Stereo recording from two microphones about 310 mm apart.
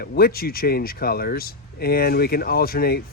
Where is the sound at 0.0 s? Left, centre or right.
Left.